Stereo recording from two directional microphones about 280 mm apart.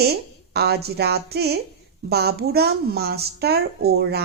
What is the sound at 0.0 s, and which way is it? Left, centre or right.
A woman's voice, right.